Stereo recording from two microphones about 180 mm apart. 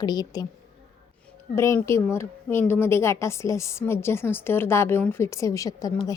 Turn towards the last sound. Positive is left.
turn(degrees=20)  # may be behind; listen again after turning